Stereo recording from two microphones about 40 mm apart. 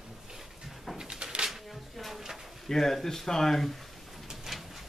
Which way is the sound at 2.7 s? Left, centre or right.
Centre.